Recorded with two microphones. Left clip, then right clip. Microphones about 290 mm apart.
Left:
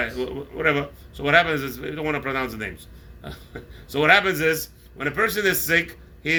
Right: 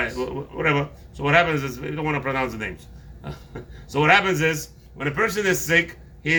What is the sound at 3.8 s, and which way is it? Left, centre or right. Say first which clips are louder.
Speech: even; centre.